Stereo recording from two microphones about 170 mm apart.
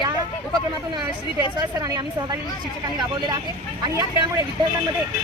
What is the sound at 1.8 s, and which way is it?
Speech, 20° right (ahead or behind).